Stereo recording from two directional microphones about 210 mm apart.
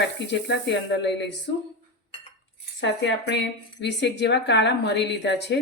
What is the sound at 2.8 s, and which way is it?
Speech, 55° left (ahead or behind).